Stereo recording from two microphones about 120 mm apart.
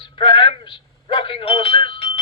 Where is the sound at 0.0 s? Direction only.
45° left (ahead or behind).